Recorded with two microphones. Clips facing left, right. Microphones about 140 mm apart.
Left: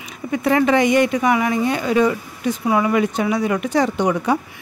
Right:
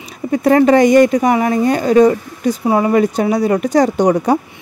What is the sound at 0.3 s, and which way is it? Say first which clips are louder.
Speech: right 6 dB; 40° right (ahead or behind).